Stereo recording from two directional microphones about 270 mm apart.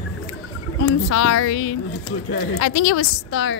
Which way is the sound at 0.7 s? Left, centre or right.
Left.